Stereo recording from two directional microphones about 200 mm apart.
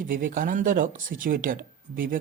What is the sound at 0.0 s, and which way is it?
Speech, 45° right (ahead or behind).